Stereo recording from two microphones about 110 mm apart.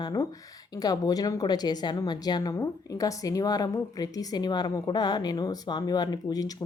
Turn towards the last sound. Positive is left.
turn(degrees=35)  # may be behind; listen again after turning